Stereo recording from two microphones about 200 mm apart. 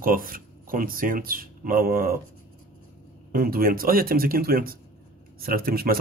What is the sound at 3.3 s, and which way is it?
Speech, 45° right (ahead or behind).